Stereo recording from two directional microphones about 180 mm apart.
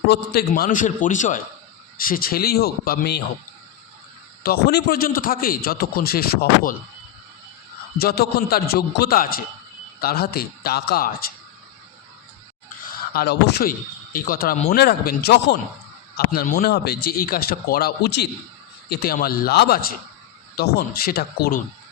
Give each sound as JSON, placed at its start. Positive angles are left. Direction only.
{"t": 0.1, "sound": "a man's voice", "side_deg": 60}
{"t": 4.4, "sound": "a man's voice", "side_deg": 60}
{"t": 7.9, "sound": "a man's voice", "side_deg": 60}
{"t": 13.1, "sound": "a man's voice", "side_deg": 60}